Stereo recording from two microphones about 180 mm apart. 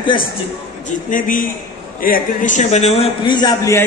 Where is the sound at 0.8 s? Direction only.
50° left (ahead or behind); by 3.8 s 20° left (ahead or behind).